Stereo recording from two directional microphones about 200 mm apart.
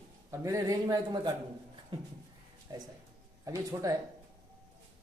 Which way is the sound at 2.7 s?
20° right (ahead or behind).